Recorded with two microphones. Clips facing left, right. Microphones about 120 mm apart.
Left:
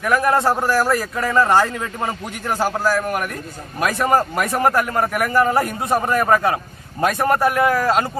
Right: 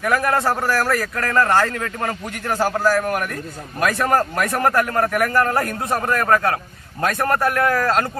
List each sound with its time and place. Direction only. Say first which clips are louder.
0.0 s a man's voice: left 2 dB; 15° left (ahead or behind)